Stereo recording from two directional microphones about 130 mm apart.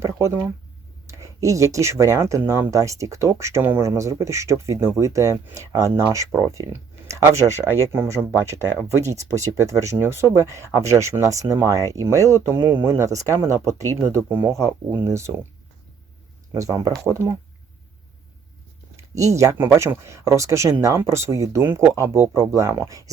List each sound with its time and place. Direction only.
0.0 s speech: 25° right (ahead or behind)
7.6 s speech: 20° left (ahead or behind)
7.9 s speech: 20° right (ahead or behind)
16.6 s speech: 25° right (ahead or behind)
19.1 s speech: 25° right (ahead or behind)